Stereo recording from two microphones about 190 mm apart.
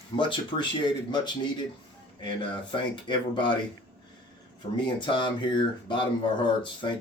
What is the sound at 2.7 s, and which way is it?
Speech, 25° left (ahead or behind).